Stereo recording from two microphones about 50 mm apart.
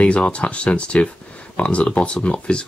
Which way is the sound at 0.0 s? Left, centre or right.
Left.